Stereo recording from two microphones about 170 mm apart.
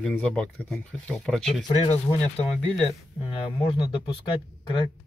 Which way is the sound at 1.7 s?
30° left (ahead or behind).